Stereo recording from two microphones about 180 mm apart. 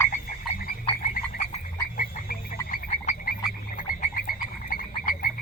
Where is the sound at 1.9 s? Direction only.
50° left (ahead or behind).